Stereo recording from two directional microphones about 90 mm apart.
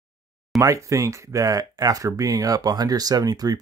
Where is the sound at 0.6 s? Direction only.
35° right (ahead or behind).